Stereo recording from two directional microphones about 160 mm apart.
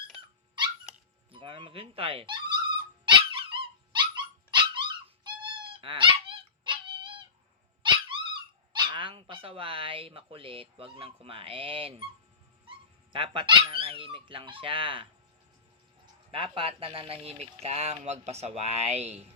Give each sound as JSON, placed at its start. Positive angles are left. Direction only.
{"t": 1.3, "sound": "a sound", "side_deg": -30}
{"t": 3.6, "sound": "dog", "side_deg": -30}
{"t": 13.1, "sound": "speech", "side_deg": -35}
{"t": 16.3, "sound": "speech", "side_deg": -35}